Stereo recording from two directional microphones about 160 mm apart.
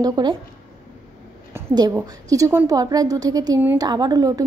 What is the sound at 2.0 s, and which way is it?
A woman's voice, 20° right (ahead or behind).